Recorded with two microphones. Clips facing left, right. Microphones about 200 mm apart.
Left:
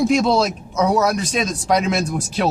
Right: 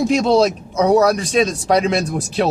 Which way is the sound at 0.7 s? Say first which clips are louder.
Right 4 dB; 35° right (ahead or behind).